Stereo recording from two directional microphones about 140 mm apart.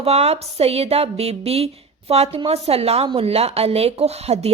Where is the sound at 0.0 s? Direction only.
50° right (ahead or behind).